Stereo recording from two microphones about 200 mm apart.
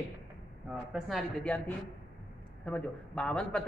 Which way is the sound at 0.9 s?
5° left (ahead or behind).